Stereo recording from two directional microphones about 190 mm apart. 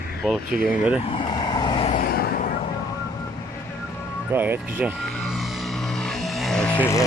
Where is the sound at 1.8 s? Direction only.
45° left (ahead or behind).